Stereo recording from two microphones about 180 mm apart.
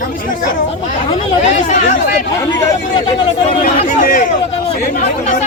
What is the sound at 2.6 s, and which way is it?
Speech, 20° left (ahead or behind).